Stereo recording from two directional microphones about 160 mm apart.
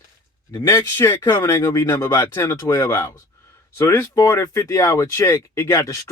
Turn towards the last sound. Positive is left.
turn(degrees=20)  # may be behind; listen again after turning